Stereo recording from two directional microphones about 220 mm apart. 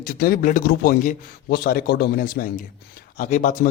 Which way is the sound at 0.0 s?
40° left (ahead or behind).